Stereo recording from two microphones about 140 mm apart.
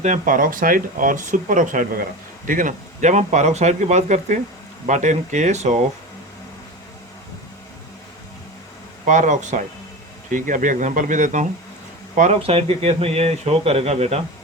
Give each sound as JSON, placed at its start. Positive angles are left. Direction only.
{"t": 0.0, "sound": "speech", "side_deg": -70}
{"t": 9.0, "sound": "speech", "side_deg": -60}
{"t": 12.4, "sound": "speech", "side_deg": -45}